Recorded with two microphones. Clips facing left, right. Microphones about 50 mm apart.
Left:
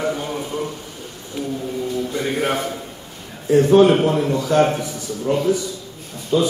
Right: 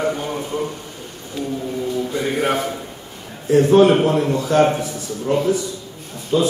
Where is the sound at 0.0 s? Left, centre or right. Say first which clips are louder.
Right 1 dB; centre.